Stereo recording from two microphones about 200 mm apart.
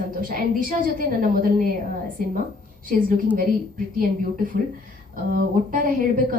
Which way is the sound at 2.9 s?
45° right (ahead or behind).